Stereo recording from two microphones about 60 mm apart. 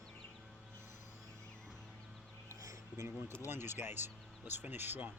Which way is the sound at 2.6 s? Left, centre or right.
Right.